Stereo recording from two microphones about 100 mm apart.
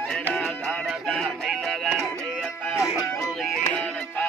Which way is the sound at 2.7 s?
30° left (ahead or behind).